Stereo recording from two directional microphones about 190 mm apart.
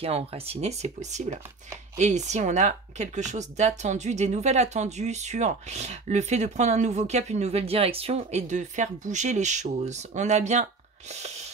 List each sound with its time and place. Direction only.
0.0 s speech: 30° right (ahead or behind)